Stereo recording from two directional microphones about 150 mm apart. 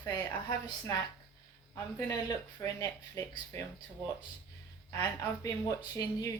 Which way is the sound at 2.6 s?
15° left (ahead or behind).